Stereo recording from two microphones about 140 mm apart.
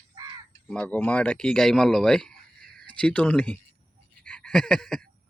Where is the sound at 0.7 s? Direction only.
10° left (ahead or behind).